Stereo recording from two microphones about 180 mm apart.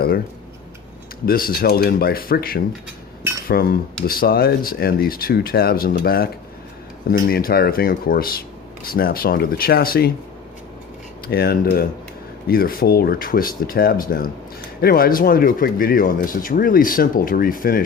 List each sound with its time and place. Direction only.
1.2 s speech: 55° left (ahead or behind)
11.3 s speech: 60° left (ahead or behind)